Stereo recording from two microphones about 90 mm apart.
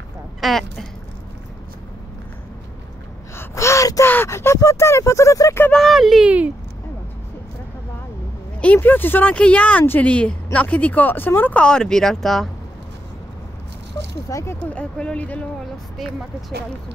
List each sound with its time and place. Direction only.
0.4 s speech: centre (ahead or behind)
3.3 s gasp: 35° left (ahead or behind)
4.1 s speech: 25° left (ahead or behind)
5.7 s speech: 5° left (ahead or behind)
6.2 s speech: 15° right (ahead or behind)
8.7 s speech: 20° left (ahead or behind)
11.6 s speech: 10° left (ahead or behind)
14.3 s speech: 30° left (ahead or behind)
14.6 s speech: 15° left (ahead or behind)
16.0 s speech: centre (ahead or behind)